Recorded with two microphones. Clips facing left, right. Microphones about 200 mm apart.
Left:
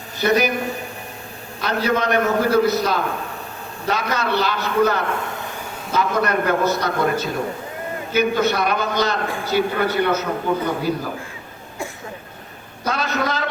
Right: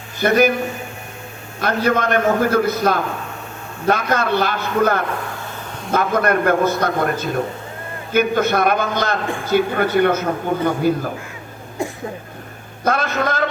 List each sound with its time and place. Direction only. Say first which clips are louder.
0.2 s a man's voice: right 3 dB; 50° right (ahead or behind)
1.6 s a man's voice: right 2 dB; 50° right (ahead or behind)
12.8 s a man's voice: right 3 dB; 50° right (ahead or behind)